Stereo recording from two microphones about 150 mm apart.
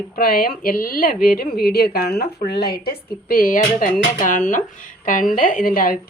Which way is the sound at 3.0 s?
75° left (ahead or behind).